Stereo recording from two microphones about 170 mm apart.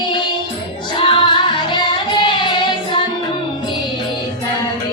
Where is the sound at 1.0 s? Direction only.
30° left (ahead or behind).